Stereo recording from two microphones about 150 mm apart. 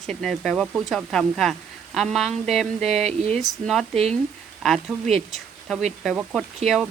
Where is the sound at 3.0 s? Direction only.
45° right (ahead or behind).